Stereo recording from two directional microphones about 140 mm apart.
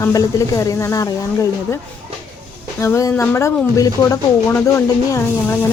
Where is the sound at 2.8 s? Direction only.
20° left (ahead or behind).